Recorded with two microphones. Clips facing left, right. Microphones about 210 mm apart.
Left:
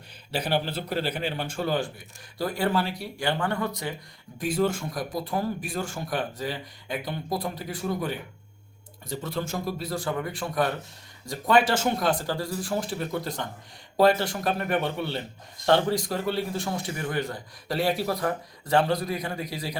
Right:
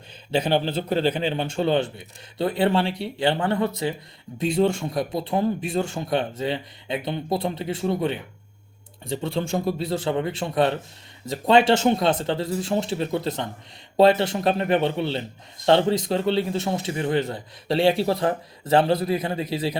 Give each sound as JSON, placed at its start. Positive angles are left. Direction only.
{"t": 0.3, "sound": "speech", "side_deg": -25}